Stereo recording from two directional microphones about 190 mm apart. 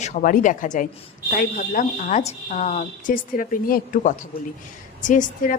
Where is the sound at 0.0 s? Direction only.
45° left (ahead or behind).